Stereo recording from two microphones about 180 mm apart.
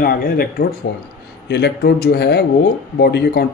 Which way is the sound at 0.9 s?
70° left (ahead or behind).